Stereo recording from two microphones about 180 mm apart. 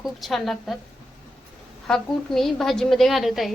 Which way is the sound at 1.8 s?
5° left (ahead or behind).